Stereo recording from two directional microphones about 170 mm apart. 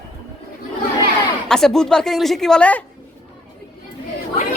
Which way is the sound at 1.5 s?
5° left (ahead or behind).